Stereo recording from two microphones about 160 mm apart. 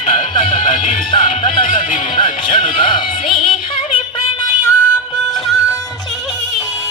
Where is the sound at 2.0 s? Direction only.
30° left (ahead or behind).